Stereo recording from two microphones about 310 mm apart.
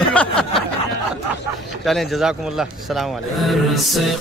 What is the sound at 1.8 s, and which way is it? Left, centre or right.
Mantra, centre.